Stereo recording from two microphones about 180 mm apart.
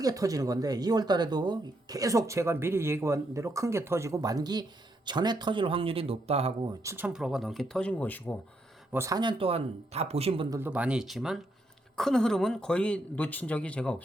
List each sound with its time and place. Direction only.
0.0 s speech: 20° right (ahead or behind)
6.8 s speech: 10° right (ahead or behind); by 8.4 s 10° left (ahead or behind)
8.9 s speech: 15° right (ahead or behind)
10.6 s speech: 5° right (ahead or behind)